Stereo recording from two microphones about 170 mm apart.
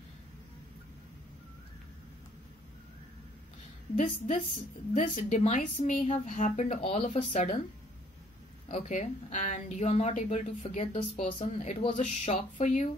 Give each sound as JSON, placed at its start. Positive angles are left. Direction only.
{"t": 3.9, "sound": "speech", "side_deg": 45}
{"t": 8.6, "sound": "speech", "side_deg": 45}